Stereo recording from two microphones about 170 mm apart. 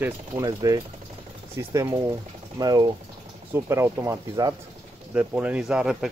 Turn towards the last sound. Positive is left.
turn(degrees=-5)  # may be behind; listen again after turning